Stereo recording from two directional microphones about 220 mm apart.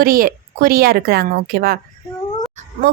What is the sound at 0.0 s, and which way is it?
A woman's voice, 40° right (ahead or behind).